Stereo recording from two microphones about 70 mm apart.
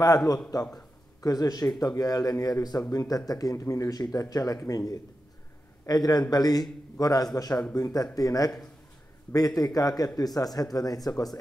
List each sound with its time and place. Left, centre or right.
0.7 s a man's voice: left
3.9 s a man's voice: left
5.9 s a man's voice: left